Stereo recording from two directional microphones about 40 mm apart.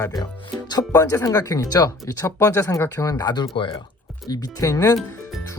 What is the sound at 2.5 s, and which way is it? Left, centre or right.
Speech, left.